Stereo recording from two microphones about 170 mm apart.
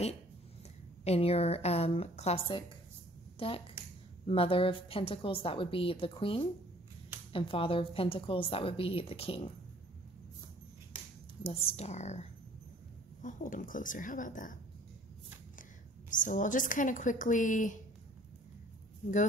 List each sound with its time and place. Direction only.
1.0 s a woman's voice: 35° left (ahead or behind)
11.4 s a woman's voice: 35° left (ahead or behind); by 14.6 s 50° left (ahead or behind)
16.1 s a woman's voice: 50° left (ahead or behind)